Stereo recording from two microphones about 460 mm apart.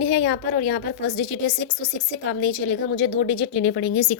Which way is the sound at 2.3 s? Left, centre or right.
Left.